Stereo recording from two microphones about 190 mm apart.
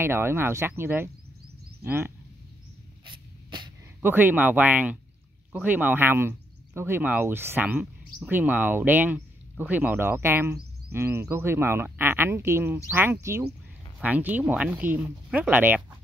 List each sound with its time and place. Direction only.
0.0 s speech: 10° right (ahead or behind)
3.1 s a sound: 25° right (ahead or behind)
4.0 s speech: 10° right (ahead or behind)